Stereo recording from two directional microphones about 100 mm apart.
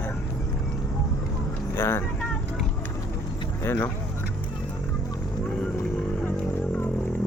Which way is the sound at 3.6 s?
20° left (ahead or behind).